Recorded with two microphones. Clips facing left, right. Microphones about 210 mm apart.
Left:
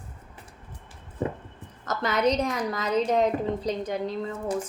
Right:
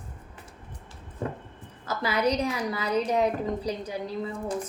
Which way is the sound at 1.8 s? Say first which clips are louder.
Left 2 dB; 10° right (ahead or behind).